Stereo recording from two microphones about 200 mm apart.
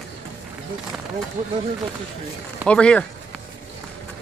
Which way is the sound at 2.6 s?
5° left (ahead or behind).